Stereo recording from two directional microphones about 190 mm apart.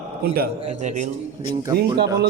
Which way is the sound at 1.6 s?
20° right (ahead or behind).